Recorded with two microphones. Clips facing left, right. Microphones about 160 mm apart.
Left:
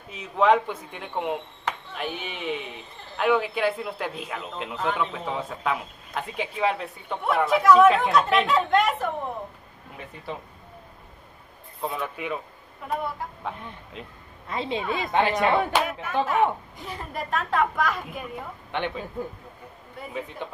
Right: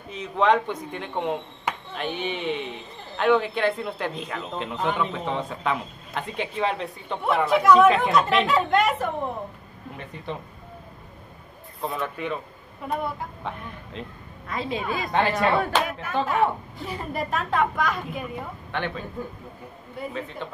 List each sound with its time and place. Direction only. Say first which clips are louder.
0.1 s speech: left 1 dB; 5° left (ahead or behind)
10.3 s speech: right 2 dB; 5° left (ahead or behind)
11.8 s speech: right 1 dB; 5° left (ahead or behind)
14.5 s a woman's voice: even; 25° left (ahead or behind)
15.8 s speech: even; centre (ahead or behind)
18.7 s speech: left 1 dB; 15° left (ahead or behind)